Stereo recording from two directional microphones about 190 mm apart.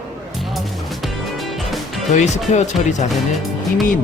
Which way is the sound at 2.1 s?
40° left (ahead or behind).